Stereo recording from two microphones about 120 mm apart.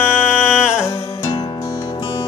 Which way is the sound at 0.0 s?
5° right (ahead or behind).